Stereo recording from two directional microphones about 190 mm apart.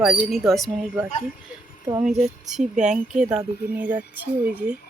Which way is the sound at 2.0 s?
40° right (ahead or behind).